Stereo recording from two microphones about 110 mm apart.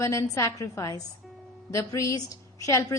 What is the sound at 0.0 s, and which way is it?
A woman's voice, 30° left (ahead or behind).